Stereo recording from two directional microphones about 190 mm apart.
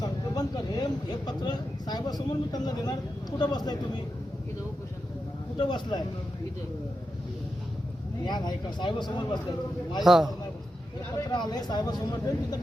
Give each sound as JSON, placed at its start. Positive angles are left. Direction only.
{"t": 0.0, "sound": "speech", "side_deg": 20}
{"t": 5.5, "sound": "speech", "side_deg": 25}
{"t": 8.3, "sound": "speech", "side_deg": 25}
{"t": 10.0, "sound": "a man's voice", "side_deg": 0}
{"t": 11.3, "sound": "speech", "side_deg": 20}